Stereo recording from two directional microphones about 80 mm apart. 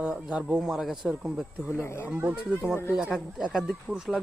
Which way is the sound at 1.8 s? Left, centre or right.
Left.